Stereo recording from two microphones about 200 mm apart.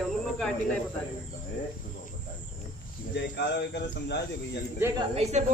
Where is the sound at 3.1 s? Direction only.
60° left (ahead or behind).